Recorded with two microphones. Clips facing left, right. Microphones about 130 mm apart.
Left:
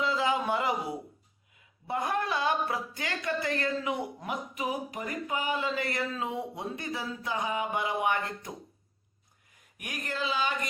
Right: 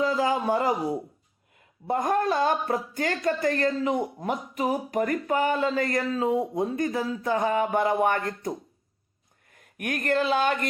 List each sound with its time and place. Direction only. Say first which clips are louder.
0.0 s a sound: right 4 dB; 40° right (ahead or behind)
1.5 s speech: right 6 dB; 45° right (ahead or behind)
9.5 s speech: right 11 dB; 55° right (ahead or behind)